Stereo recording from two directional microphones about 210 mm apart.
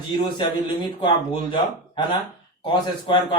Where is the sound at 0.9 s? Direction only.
25° left (ahead or behind).